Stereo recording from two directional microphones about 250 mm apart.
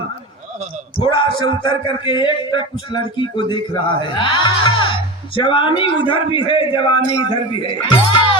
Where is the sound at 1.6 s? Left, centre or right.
Centre.